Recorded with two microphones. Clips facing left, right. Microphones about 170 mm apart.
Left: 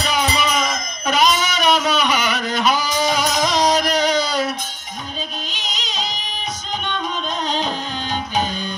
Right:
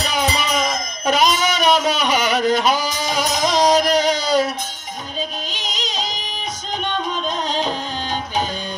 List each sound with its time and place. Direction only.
0.1 s music: 45° right (ahead or behind)
1.1 s a sound: 45° right (ahead or behind)
2.6 s music: 40° right (ahead or behind)
5.9 s music: 40° right (ahead or behind)